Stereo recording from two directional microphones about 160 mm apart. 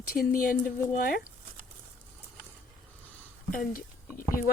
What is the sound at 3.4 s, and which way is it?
Speech, 60° left (ahead or behind).